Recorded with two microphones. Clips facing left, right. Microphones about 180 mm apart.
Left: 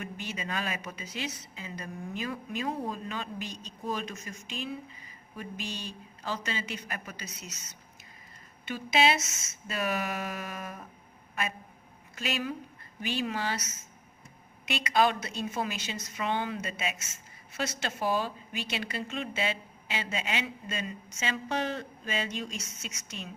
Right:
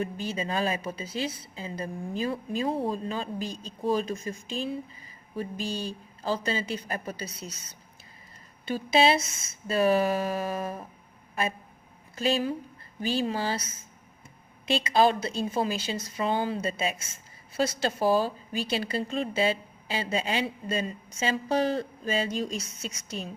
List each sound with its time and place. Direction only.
0.0 s a woman's voice: 30° right (ahead or behind)
12.1 s a woman's voice: 30° right (ahead or behind)